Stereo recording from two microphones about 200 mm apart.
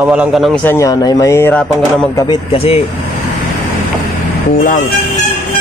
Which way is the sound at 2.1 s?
20° left (ahead or behind).